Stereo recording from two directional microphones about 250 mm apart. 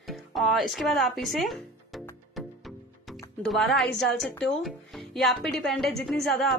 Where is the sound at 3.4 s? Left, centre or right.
Centre.